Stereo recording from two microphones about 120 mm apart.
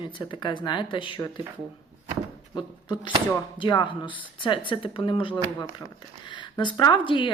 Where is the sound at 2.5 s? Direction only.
40° left (ahead or behind).